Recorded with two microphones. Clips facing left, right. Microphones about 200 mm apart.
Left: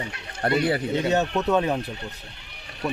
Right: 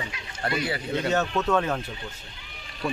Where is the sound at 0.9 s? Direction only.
20° left (ahead or behind).